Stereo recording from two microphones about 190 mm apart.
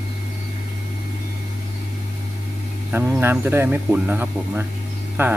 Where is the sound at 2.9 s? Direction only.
10° right (ahead or behind).